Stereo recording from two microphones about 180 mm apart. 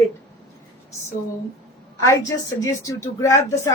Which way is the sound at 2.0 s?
20° left (ahead or behind).